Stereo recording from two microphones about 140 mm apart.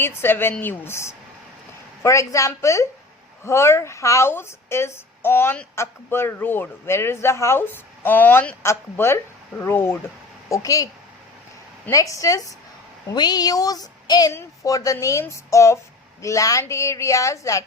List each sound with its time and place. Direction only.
0.0 s speech: 15° left (ahead or behind)
11.9 s speech: 25° left (ahead or behind)